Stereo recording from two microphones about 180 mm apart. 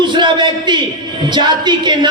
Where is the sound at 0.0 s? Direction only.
25° right (ahead or behind).